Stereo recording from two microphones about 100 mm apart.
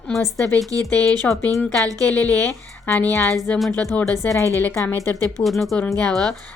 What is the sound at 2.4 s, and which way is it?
Speech, 20° left (ahead or behind).